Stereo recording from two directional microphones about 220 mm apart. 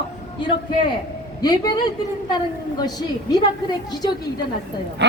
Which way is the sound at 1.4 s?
20° left (ahead or behind).